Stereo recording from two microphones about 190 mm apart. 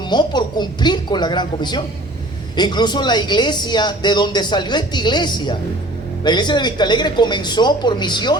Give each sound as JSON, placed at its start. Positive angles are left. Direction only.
{"t": 0.0, "sound": "speech", "side_deg": 25}